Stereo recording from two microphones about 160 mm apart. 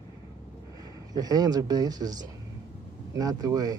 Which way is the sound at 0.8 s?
25° right (ahead or behind).